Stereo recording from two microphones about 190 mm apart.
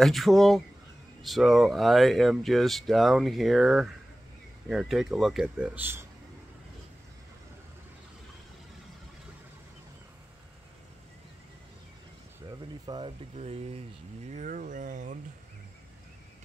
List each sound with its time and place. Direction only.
0.0 s speech: centre (ahead or behind)
12.4 s a sound: 20° right (ahead or behind)
13.4 s speech: 30° right (ahead or behind)